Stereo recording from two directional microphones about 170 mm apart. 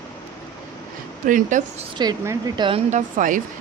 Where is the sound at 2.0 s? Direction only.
20° right (ahead or behind).